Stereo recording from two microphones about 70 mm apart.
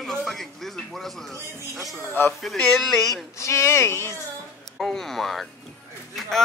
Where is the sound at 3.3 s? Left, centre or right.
Left.